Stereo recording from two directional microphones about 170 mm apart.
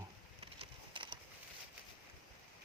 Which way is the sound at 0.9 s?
30° right (ahead or behind).